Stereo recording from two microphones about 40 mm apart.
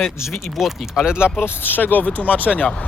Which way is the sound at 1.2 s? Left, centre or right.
Left.